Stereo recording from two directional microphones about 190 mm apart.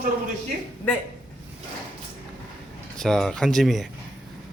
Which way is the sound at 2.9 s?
5° left (ahead or behind).